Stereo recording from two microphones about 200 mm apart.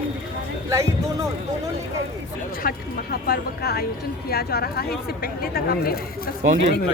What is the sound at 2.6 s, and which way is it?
Speech, 45° left (ahead or behind).